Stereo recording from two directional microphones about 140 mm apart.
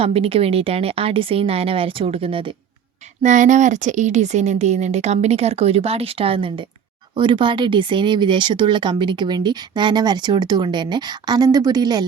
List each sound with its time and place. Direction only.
0.0 s speech: 45° right (ahead or behind)
3.2 s speech: 60° right (ahead or behind); by 12.0 s 30° right (ahead or behind)